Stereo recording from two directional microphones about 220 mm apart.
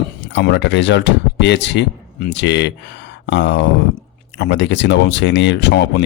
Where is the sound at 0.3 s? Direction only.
50° left (ahead or behind).